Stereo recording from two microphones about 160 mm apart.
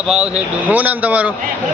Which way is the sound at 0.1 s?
5° right (ahead or behind).